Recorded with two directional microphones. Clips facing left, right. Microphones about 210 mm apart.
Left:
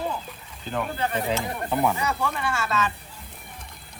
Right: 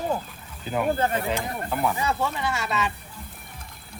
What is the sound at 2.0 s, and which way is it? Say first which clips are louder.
Speech: right 1 dB; 25° right (ahead or behind).